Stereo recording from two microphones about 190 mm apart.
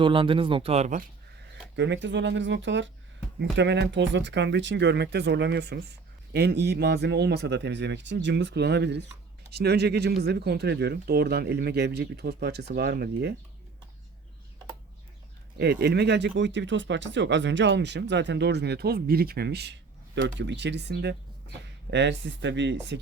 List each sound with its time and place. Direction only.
0.0 s speech: 25° right (ahead or behind)
1.7 s speech: 70° right (ahead or behind)
15.5 s speech: 60° right (ahead or behind)